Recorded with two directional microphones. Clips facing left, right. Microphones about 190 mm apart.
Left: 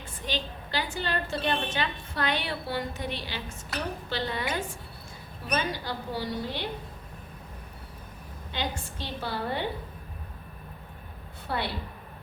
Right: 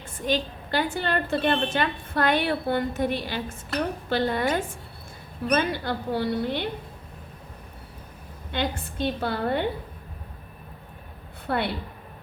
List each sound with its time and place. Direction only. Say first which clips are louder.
0.3 s a woman's voice: right 8 dB; 50° right (ahead or behind)
8.5 s a woman's voice: right 6 dB; 55° right (ahead or behind)
11.4 s a woman's voice: right 5 dB; 60° right (ahead or behind)